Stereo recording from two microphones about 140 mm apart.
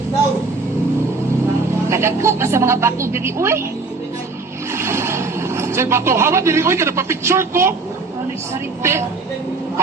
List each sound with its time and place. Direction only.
1.9 s a woman's voice: 20° right (ahead or behind)
4.7 s speech: 20° right (ahead or behind)
8.8 s a woman's voice: 20° right (ahead or behind)